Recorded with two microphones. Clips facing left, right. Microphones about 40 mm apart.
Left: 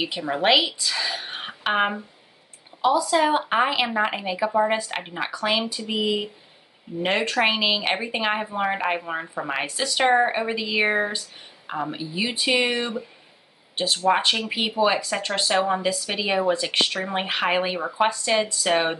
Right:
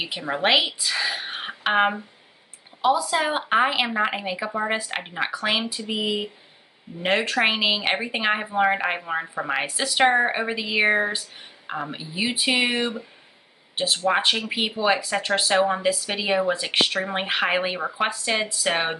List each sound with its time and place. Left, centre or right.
0.0 s speech: centre
0.6 s speech: centre
2.9 s a woman's voice: centre
3.4 s speech: centre
14.0 s speech: centre